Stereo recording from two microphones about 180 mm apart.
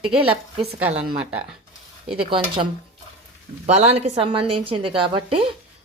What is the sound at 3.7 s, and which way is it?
A woman's voice, 35° right (ahead or behind).